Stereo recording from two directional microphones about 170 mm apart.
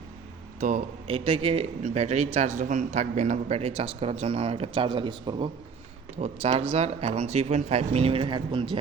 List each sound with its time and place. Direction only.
0.6 s speech: 40° right (ahead or behind)
6.1 s speech: 40° right (ahead or behind)